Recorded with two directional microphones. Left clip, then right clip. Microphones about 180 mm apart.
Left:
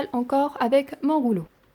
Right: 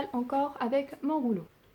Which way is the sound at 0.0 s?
60° left (ahead or behind).